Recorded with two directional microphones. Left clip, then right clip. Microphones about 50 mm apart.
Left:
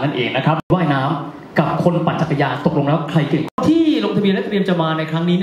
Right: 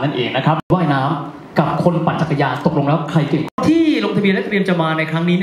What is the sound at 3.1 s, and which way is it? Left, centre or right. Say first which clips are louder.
Speech: even; left.